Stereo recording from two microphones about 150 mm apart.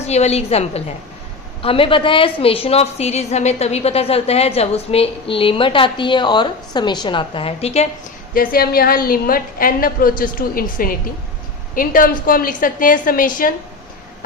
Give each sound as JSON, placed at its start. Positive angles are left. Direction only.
{"t": 0.0, "sound": "a woman's voice", "side_deg": 45}
{"t": 8.3, "sound": "a woman's voice", "side_deg": 70}